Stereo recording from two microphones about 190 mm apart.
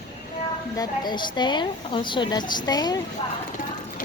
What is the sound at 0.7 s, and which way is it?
A woman's voice, 25° left (ahead or behind).